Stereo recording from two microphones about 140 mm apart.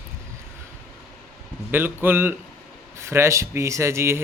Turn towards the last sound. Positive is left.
turn(degrees=-20)  # may be behind; listen again after turning